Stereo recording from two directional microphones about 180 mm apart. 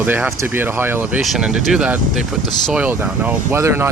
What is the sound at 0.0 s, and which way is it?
Speech, 5° right (ahead or behind).